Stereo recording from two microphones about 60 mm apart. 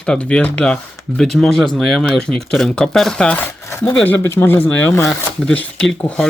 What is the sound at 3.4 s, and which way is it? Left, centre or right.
Chopping, left.